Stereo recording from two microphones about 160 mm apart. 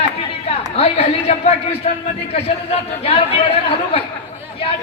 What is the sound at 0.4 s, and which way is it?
A woman's voice, 40° left (ahead or behind).